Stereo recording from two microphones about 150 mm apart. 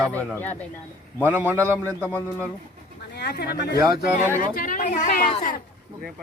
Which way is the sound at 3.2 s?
90° left.